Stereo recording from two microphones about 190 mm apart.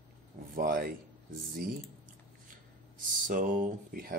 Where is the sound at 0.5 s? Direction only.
50° right (ahead or behind).